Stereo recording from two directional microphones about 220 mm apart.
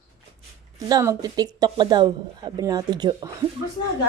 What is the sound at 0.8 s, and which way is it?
Speech, 15° right (ahead or behind).